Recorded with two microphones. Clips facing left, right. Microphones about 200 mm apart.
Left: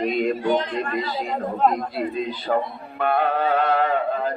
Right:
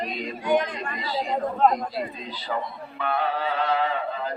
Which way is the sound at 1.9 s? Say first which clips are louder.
Left 6 dB; 55° left (ahead or behind).